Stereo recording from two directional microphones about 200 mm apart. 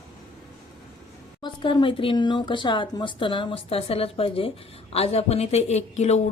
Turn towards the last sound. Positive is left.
turn(degrees=35)  # may be behind; listen again after turning